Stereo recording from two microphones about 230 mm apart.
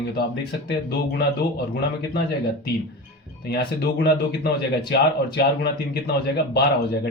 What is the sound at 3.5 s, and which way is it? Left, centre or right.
A man's voice, left.